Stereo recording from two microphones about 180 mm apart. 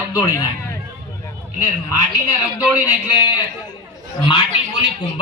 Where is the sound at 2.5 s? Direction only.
10° right (ahead or behind).